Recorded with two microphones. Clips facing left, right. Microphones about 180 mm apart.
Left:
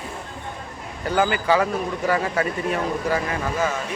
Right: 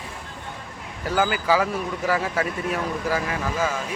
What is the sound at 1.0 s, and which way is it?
Speech, centre (ahead or behind).